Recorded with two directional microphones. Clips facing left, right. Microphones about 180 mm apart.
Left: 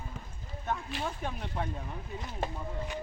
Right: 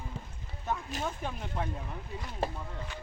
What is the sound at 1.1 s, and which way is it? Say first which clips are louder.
Speech: even; centre (ahead or behind).